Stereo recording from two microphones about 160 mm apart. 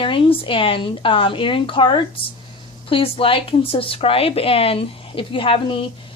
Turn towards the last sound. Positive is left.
turn(degrees=35)  # may be behind; listen again after turning